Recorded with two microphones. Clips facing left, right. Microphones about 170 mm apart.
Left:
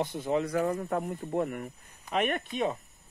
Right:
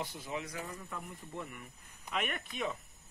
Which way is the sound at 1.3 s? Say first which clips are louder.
Left 14 dB; 70° left (ahead or behind).